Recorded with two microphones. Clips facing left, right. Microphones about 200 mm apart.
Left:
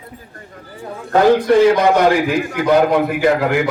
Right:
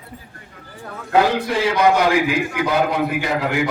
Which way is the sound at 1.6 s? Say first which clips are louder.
Left 4 dB; 45° left (ahead or behind).